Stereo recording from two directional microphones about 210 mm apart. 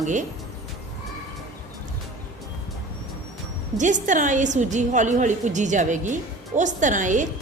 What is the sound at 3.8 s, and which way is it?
A woman's voice, 35° right (ahead or behind).